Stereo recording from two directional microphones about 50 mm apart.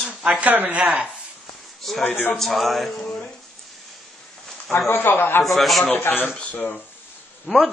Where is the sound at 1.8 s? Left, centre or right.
Centre.